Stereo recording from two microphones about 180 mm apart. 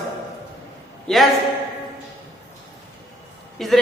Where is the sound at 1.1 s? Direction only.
5° left (ahead or behind).